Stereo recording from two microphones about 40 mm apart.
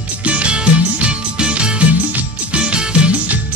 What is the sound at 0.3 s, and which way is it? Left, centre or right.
Music, right.